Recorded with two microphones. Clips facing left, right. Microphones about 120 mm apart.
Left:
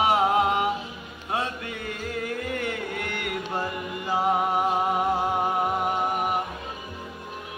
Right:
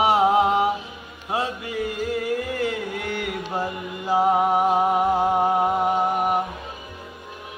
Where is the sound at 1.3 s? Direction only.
10° right (ahead or behind).